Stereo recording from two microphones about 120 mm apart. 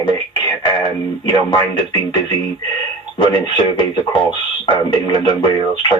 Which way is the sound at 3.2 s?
40° left (ahead or behind).